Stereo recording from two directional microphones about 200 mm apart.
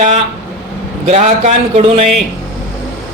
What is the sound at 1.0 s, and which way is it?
Speech, 30° right (ahead or behind).